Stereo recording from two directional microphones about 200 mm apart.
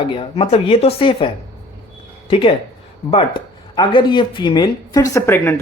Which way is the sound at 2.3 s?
25° left (ahead or behind).